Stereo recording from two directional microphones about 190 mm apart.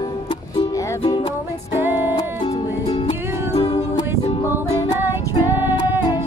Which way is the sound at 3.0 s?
30° left (ahead or behind).